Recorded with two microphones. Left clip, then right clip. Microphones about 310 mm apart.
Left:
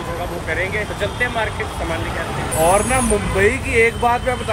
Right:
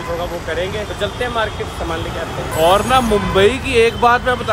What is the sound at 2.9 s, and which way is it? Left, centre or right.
Speech, centre.